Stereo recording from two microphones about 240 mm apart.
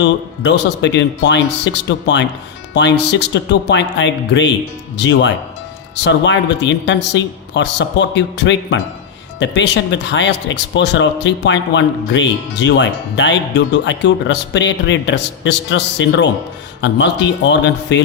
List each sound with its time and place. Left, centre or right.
0.0 s speech: left